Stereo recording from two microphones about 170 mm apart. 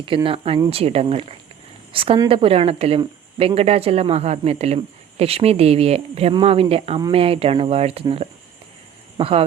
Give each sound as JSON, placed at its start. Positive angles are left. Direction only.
{"t": 0.0, "sound": "a woman's voice", "side_deg": -30}